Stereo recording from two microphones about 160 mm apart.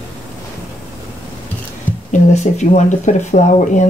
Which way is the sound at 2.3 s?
50° left (ahead or behind).